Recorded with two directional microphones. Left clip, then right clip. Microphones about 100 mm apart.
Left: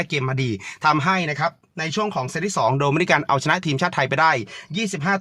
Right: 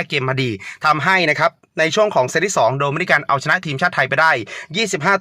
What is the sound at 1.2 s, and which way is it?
Speech, 50° right (ahead or behind).